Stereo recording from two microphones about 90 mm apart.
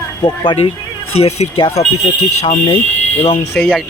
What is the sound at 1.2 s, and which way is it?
Speech, 90° left.